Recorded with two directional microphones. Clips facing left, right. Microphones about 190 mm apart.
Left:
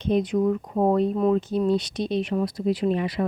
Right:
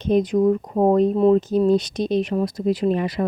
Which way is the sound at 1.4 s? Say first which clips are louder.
Right 5 dB; 40° right (ahead or behind).